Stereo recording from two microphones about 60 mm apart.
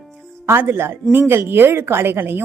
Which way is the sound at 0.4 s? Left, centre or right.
Right.